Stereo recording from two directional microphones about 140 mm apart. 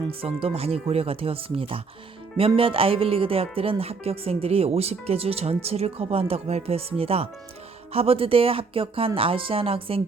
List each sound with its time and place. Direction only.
0.1 s speech: 40° right (ahead or behind)